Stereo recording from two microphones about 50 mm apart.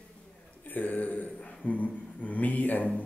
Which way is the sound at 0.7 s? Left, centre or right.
Left.